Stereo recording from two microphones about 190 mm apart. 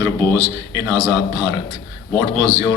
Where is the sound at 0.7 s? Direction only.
25° right (ahead or behind).